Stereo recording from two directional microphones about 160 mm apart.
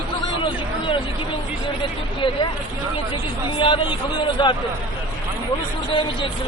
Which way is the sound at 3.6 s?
30° left (ahead or behind).